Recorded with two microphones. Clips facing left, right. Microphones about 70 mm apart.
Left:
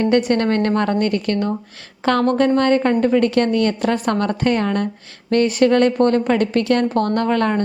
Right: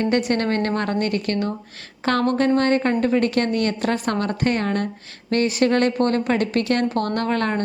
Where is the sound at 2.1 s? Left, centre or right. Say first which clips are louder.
Left 2 dB; left.